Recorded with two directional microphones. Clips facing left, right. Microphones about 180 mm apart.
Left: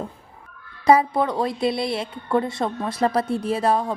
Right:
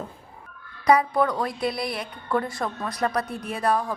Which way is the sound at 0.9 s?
25° left (ahead or behind).